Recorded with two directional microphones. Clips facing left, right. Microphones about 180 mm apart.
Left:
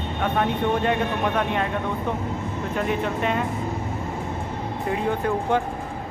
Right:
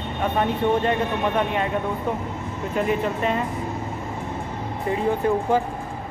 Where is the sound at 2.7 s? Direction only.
Centre (ahead or behind).